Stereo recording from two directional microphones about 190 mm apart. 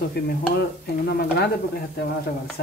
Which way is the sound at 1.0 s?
60° left (ahead or behind).